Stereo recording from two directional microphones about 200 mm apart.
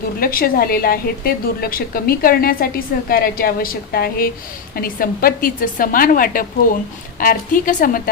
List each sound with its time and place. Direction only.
0.2 s a woman's voice: 50° left (ahead or behind)